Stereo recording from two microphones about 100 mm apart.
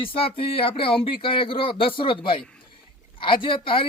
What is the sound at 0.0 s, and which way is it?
Speech, 65° left (ahead or behind).